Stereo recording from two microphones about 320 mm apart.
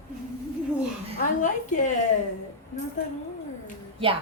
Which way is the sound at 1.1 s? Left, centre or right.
Left.